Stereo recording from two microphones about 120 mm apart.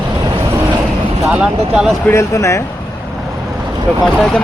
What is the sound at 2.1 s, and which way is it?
Speech, 25° left (ahead or behind).